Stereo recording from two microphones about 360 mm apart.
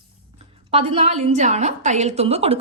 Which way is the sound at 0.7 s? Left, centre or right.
Centre.